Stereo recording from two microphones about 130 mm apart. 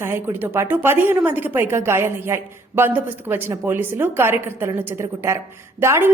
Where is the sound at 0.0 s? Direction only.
15° right (ahead or behind).